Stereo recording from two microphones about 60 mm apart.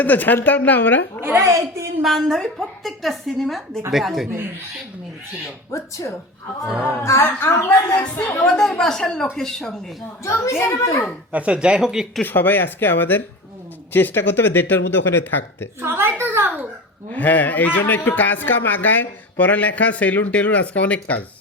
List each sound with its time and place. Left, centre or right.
0.0 s speech: left
1.2 s a woman's voice: right
1.5 s a woman's voice: right
2.0 s a woman's voice: centre
5.7 s a woman's voice: left
6.7 s speech: right
7.0 s a child's voice: left
8.2 s speech: left
8.4 s speech: centre
10.2 s a child's voice: left
11.3 s speech: right
12.2 s speech: left
15.8 s a woman's voice: right
17.1 s speech: left